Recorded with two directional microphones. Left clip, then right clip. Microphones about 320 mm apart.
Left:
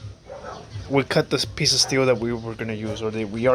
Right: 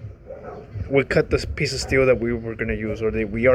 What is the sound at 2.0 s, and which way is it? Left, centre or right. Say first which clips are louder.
Speech: right 2 dB; left.